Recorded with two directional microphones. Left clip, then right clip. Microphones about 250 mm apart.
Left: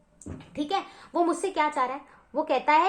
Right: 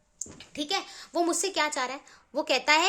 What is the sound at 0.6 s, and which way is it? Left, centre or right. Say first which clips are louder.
A woman's voice: left 2 dB; right.